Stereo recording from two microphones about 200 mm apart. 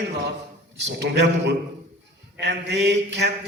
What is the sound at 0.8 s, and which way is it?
A man's voice, 60° right (ahead or behind).